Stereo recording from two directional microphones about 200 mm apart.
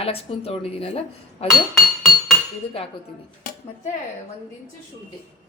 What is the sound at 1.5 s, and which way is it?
Speech, centre (ahead or behind).